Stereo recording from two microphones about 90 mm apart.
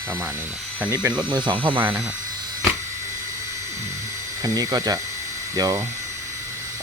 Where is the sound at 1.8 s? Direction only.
20° right (ahead or behind).